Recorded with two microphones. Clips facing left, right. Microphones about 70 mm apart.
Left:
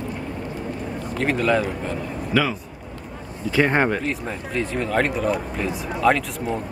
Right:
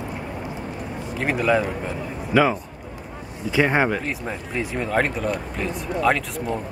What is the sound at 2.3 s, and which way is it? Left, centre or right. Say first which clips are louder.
Speech: right 3 dB; centre.